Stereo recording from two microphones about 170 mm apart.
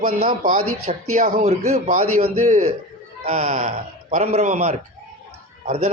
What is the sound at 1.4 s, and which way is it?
A man's voice, 40° right (ahead or behind).